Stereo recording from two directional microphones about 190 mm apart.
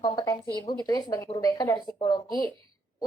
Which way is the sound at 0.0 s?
20° left (ahead or behind).